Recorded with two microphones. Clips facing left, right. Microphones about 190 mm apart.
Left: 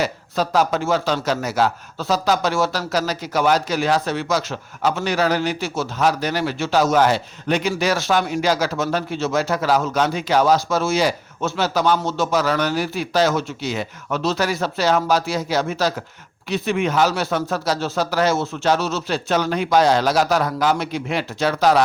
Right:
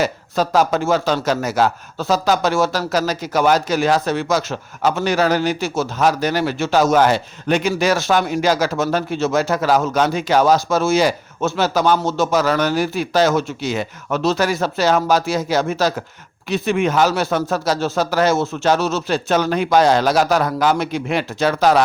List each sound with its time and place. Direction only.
0.0 s a man's voice: 45° right (ahead or behind)